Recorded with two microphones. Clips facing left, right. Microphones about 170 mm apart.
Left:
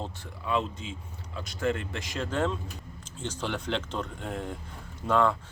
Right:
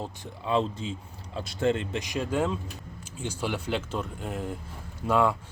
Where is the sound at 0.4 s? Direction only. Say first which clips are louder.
Right 3 dB; 30° right (ahead or behind).